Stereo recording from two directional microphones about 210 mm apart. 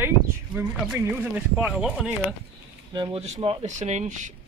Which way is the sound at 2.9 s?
25° right (ahead or behind).